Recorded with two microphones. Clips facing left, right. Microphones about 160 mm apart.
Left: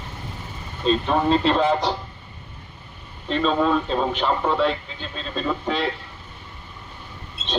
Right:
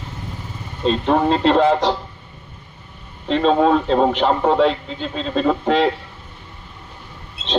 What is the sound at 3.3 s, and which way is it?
Speech, 70° right (ahead or behind).